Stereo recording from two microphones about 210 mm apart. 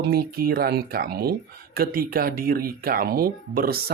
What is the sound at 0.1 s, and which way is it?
Speech, 45° right (ahead or behind).